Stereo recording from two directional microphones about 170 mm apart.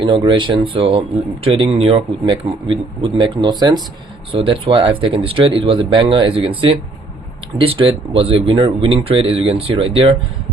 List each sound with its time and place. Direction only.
0.0 s a man's voice: 30° right (ahead or behind)